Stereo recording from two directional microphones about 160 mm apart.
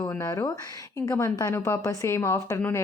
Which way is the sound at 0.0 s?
25° left (ahead or behind).